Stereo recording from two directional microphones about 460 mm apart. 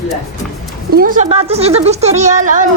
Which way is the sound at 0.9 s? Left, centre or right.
Centre.